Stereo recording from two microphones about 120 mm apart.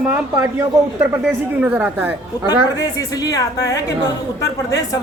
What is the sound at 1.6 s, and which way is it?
Speech, 15° right (ahead or behind).